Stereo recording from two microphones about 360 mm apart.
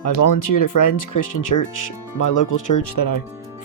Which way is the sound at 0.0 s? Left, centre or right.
Left.